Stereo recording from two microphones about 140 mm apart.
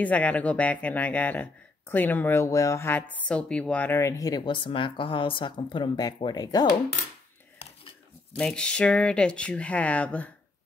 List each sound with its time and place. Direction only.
0.0 s speech: 10° left (ahead or behind)
4.5 s speech: 35° left (ahead or behind)
8.4 s speech: 5° left (ahead or behind)